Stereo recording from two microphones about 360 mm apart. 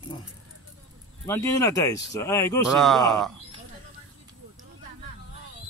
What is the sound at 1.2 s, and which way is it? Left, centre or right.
Speech, centre.